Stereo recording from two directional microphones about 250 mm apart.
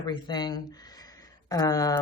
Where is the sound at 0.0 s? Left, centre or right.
Centre.